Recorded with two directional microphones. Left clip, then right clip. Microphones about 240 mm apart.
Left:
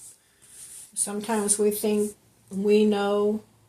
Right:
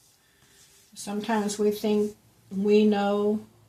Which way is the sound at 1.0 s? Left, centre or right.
Left.